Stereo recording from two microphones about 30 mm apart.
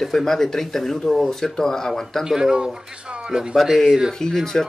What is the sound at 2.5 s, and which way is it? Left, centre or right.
Speech, right.